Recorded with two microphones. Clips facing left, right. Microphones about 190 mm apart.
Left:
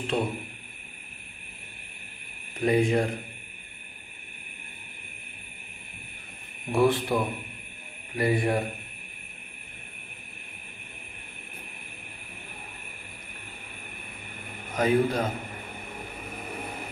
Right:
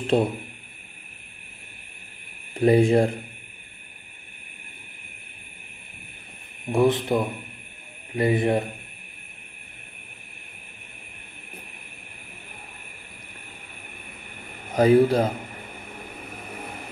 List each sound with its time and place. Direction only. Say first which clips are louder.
0.1 s speech: right 7 dB; 35° right (ahead or behind)
2.6 s speech: right 6 dB; 30° right (ahead or behind)
6.7 s speech: right 3 dB; 20° right (ahead or behind)
14.8 s speech: right 7 dB; 35° right (ahead or behind)